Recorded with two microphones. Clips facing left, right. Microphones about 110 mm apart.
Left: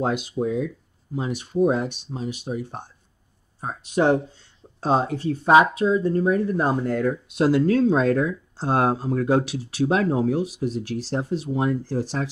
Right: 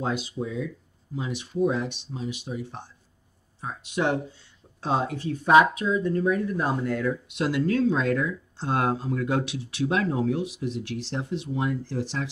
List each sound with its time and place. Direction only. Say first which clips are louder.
0.4 s speech: left 6 dB; 55° left (ahead or behind)